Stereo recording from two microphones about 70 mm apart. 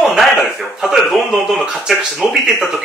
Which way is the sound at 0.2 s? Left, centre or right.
Centre.